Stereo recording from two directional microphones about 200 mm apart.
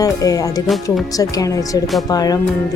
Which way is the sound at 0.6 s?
Centre (ahead or behind).